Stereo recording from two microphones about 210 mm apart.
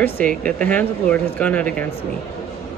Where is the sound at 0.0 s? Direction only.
5° left (ahead or behind).